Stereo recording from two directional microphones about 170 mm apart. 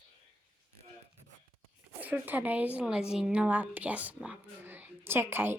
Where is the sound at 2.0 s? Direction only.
10° right (ahead or behind).